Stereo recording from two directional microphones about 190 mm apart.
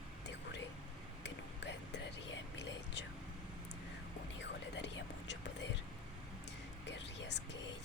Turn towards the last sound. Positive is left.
turn(degrees=65)  # may be behind; listen again after turning